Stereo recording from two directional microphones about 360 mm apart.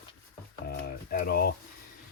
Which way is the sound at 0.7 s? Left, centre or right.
Left.